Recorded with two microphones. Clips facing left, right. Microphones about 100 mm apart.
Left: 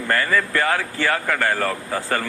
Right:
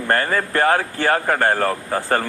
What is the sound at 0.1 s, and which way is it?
Speech, 40° right (ahead or behind).